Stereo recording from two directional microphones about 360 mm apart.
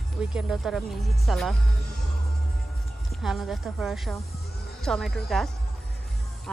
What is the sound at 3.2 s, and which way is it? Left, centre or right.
Speech, centre.